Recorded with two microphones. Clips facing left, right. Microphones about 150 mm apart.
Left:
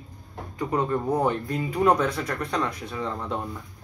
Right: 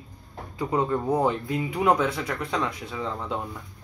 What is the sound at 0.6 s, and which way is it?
Speech, 10° right (ahead or behind).